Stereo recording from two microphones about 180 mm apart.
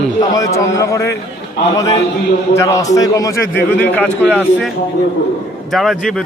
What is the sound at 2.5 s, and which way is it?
A man's voice, 20° left (ahead or behind).